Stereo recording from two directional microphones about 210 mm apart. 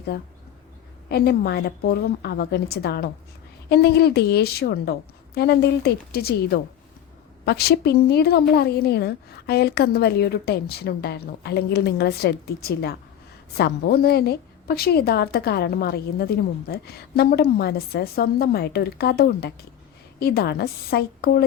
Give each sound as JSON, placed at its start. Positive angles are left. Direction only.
{"t": 1.1, "sound": "a woman's voice", "side_deg": 50}